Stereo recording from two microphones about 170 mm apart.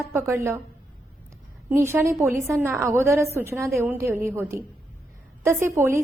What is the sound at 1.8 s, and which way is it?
A woman's voice, 15° right (ahead or behind).